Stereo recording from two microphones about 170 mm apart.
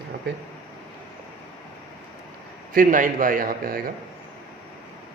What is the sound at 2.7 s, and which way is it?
A man's voice, 50° right (ahead or behind).